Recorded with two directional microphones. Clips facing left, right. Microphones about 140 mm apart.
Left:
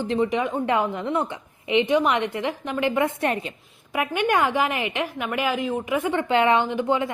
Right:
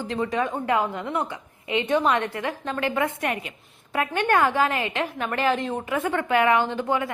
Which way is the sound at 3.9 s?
15° left (ahead or behind).